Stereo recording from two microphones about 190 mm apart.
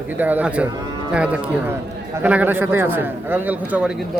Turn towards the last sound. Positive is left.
turn(degrees=-5)  # may be behind; listen again after turning